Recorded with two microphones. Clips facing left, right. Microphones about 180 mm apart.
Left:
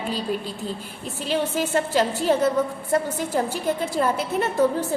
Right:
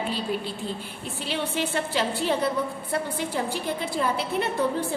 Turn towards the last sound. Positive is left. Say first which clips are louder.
# left 4 dB
turn(degrees=45)  # may be behind; listen again after turning